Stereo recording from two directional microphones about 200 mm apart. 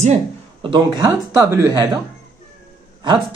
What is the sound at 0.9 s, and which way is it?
Speech, 15° right (ahead or behind).